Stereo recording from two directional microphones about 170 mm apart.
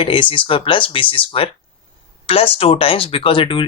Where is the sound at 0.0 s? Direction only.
30° left (ahead or behind).